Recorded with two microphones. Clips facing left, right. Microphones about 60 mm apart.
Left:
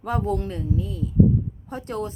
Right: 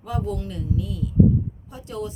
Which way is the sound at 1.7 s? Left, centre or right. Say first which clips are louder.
Left 3 dB; left.